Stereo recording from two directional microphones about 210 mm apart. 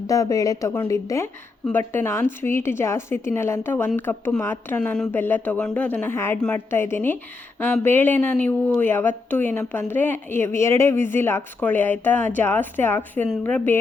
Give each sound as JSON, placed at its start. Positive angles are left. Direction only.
{"t": 0.1, "sound": "a woman's voice", "side_deg": 15}